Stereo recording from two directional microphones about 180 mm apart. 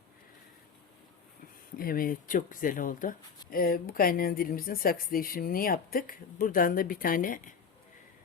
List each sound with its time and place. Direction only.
1.8 s speech: 50° left (ahead or behind)